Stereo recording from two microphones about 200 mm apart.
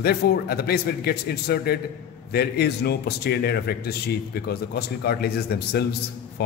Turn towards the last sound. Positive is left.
turn(degrees=55)  # may be behind; listen again after turning